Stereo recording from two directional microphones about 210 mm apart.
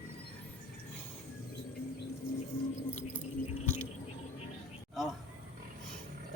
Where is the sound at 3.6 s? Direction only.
35° left (ahead or behind).